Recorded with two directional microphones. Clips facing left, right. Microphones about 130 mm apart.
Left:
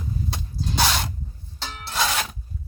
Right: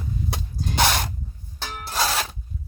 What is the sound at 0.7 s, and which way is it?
Spray, 55° right (ahead or behind).